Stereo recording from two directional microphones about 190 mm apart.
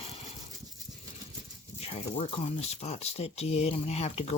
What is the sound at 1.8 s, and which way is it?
Speech, 30° left (ahead or behind).